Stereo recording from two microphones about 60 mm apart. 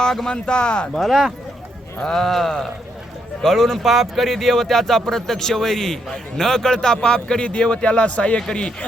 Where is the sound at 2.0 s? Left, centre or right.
Centre.